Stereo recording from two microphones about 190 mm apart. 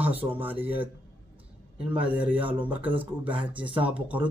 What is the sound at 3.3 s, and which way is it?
Speech, 25° right (ahead or behind).